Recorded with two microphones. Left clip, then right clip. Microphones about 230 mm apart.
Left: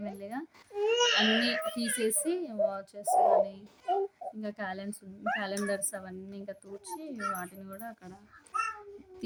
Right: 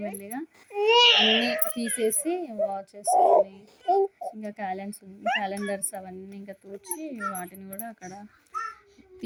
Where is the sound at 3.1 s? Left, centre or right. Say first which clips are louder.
Right 5 dB; right.